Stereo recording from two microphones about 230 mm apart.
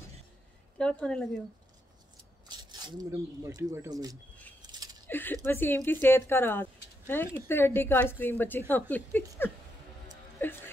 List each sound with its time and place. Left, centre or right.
0.7 s a woman's voice: centre
2.4 s speech: centre
4.6 s a sound: centre
5.0 s speech: centre
10.4 s music: centre